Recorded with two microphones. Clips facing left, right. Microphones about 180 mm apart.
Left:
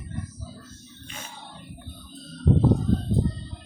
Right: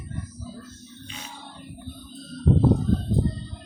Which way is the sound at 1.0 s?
50° left (ahead or behind).